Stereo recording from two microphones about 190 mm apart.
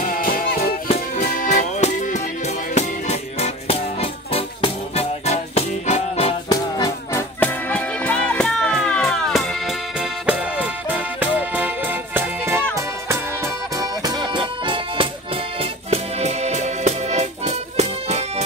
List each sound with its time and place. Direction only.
0.0 s music: 50° left (ahead or behind); by 6.6 s 30° left (ahead or behind)
6.8 s music: 10° left (ahead or behind); by 12.6 s 10° right (ahead or behind)
13.7 s music: 20° right (ahead or behind)
15.9 s accordion: 35° right (ahead or behind)